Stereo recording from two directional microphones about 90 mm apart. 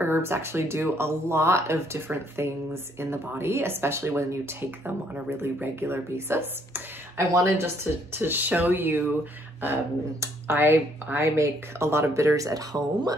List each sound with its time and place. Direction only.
0.0 s speech: 25° right (ahead or behind)
10.2 s speech: 25° right (ahead or behind); by 13.1 s 40° right (ahead or behind)